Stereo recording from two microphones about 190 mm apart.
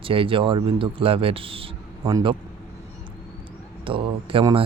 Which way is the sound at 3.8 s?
30° right (ahead or behind).